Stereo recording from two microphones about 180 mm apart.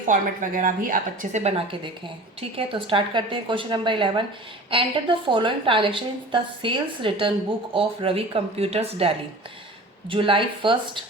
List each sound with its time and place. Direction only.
0.1 s a woman's voice: 50° right (ahead or behind); by 10.8 s 30° right (ahead or behind)